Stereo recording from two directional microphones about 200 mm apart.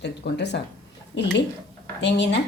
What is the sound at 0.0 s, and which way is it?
A woman's voice, 60° left (ahead or behind).